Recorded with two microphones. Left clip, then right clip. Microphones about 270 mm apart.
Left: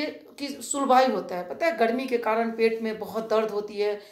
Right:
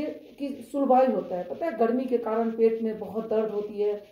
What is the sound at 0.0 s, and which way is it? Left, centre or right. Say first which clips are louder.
A woman's voice: left 1 dB; left.